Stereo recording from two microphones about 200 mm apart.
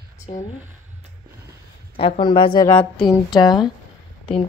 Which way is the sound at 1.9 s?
30° left (ahead or behind).